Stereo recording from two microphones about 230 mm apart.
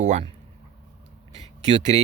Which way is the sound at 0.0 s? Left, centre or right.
Right.